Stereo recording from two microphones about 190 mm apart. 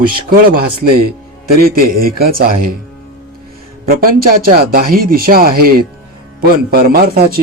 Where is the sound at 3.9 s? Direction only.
50° right (ahead or behind).